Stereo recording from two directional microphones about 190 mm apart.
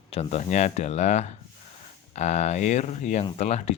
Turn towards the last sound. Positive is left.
turn(degrees=35)  # may be behind; listen again after turning